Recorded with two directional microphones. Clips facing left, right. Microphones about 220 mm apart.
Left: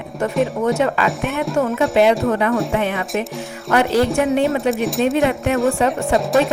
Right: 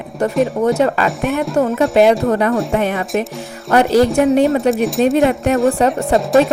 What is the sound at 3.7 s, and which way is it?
Speech, 40° right (ahead or behind).